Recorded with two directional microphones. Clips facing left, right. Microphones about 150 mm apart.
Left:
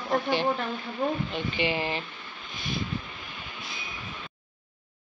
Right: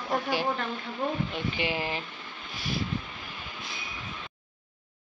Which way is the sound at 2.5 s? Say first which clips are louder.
Even; 5° right (ahead or behind).